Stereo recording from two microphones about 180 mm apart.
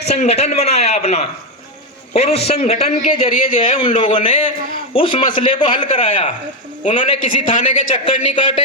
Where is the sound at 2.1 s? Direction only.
35° left (ahead or behind).